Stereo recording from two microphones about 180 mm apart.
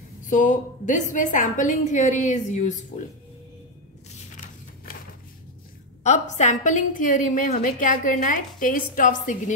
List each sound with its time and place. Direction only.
0.3 s a woman's voice: 45° left (ahead or behind)
6.0 s a woman's voice: 40° left (ahead or behind)